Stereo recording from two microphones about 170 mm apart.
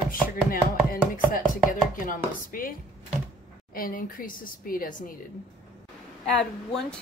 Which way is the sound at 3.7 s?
55° left (ahead or behind).